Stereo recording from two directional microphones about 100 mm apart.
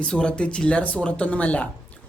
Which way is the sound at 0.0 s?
10° left (ahead or behind).